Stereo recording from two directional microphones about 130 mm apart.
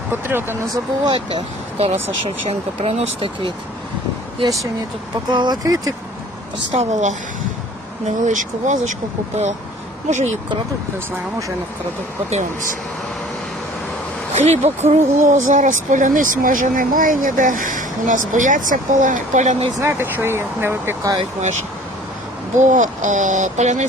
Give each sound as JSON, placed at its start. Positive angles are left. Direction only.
{"t": 0.1, "sound": "speech", "side_deg": -15}
{"t": 1.0, "sound": "speech", "side_deg": -35}
{"t": 1.8, "sound": "speech", "side_deg": -50}
{"t": 5.3, "sound": "speech", "side_deg": -35}
{"t": 6.7, "sound": "speech", "side_deg": -65}
{"t": 8.3, "sound": "speech", "side_deg": -75}
{"t": 10.1, "sound": "speech", "side_deg": -65}
{"t": 14.3, "sound": "speech", "side_deg": -60}
{"t": 19.8, "sound": "speech", "side_deg": -20}
{"t": 22.5, "sound": "speech", "side_deg": -70}